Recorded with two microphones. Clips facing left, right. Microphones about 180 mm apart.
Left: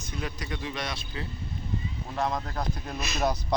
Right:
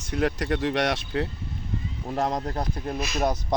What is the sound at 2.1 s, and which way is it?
Speech, 40° right (ahead or behind).